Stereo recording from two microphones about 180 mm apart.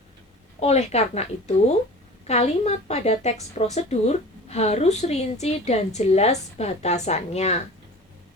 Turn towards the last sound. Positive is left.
turn(degrees=35)  # may be behind; listen again after turning